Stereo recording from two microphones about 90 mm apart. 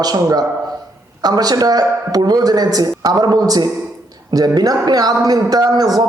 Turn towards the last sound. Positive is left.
turn(degrees=-45)  # may be behind; listen again after turning